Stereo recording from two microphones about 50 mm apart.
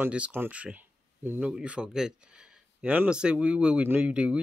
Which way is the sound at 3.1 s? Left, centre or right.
Centre.